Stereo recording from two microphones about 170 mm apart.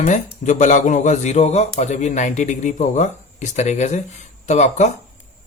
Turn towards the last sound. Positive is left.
turn(degrees=40)  # may be behind; listen again after turning